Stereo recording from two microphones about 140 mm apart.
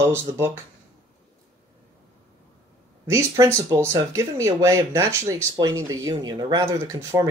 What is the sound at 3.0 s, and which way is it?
Speech, 20° right (ahead or behind).